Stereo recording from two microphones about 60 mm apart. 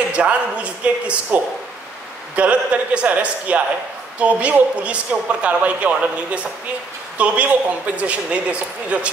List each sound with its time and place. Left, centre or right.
0.1 s speech: right